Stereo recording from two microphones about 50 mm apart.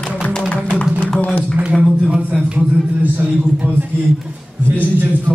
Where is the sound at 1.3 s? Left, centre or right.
Right.